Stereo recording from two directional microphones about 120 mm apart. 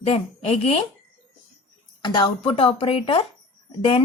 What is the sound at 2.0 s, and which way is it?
A woman's voice, 40° left (ahead or behind).